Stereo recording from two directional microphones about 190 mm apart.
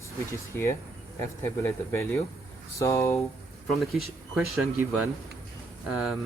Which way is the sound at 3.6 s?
Centre (ahead or behind).